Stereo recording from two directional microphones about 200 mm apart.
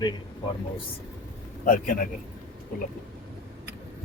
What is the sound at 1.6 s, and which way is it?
Speech, 45° left (ahead or behind).